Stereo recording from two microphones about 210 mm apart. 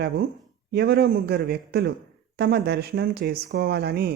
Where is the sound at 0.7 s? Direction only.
50° right (ahead or behind).